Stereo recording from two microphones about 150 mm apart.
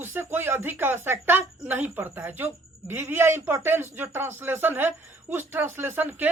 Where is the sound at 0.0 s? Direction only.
15° right (ahead or behind).